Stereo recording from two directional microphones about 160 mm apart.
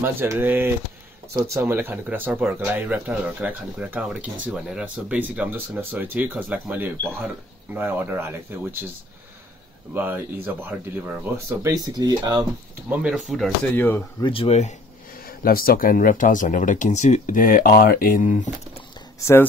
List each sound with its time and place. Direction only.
0.0 s speech: 15° right (ahead or behind)
9.9 s speech: 10° right (ahead or behind)
12.9 s speech: 5° right (ahead or behind)
13.7 s speech: 15° left (ahead or behind)
14.2 s speech: 35° left (ahead or behind)
15.2 s speech: 65° left (ahead or behind); by 18.5 s 50° left (ahead or behind)
19.1 s speech: 15° left (ahead or behind)